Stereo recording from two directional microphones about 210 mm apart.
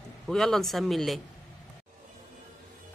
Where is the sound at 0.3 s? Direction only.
Centre (ahead or behind).